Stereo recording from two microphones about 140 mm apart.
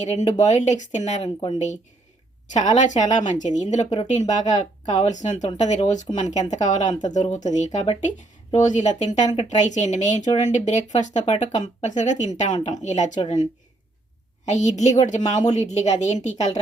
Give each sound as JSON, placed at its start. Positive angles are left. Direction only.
{"t": 0.0, "sound": "speech", "side_deg": 55}
{"t": 14.4, "sound": "speech", "side_deg": 55}